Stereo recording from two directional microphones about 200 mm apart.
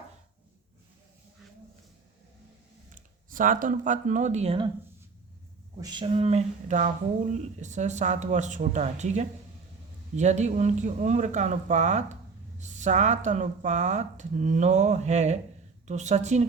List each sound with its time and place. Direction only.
2.9 s speech: 40° right (ahead or behind)
5.8 s speech: 25° right (ahead or behind)